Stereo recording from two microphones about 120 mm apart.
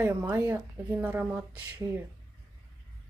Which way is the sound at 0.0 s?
15° right (ahead or behind).